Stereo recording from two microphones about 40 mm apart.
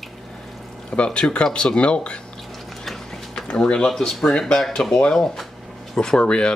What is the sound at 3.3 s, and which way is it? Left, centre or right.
Speech, left.